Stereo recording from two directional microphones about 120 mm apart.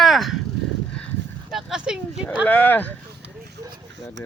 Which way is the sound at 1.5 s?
5° right (ahead or behind).